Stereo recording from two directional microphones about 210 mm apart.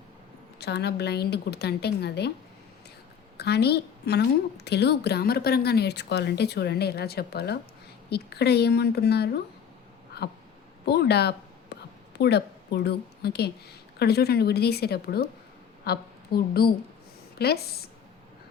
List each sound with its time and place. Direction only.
0.6 s a woman's voice: 50° left (ahead or behind)
3.3 s a woman's voice: 50° left (ahead or behind)
10.8 s a woman's voice: 50° left (ahead or behind)